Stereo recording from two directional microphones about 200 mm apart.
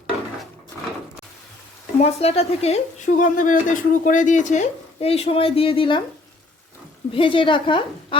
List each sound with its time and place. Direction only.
2.0 s speech: 30° left (ahead or behind)
7.1 s a woman's voice: 25° left (ahead or behind)